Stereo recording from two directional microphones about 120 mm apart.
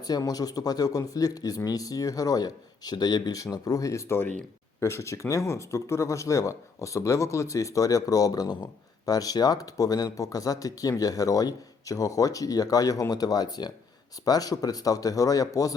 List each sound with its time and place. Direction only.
0.0 s speech: 30° left (ahead or behind)